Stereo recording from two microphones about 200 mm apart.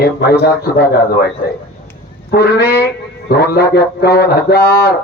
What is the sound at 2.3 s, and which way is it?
Speech, 50° left (ahead or behind).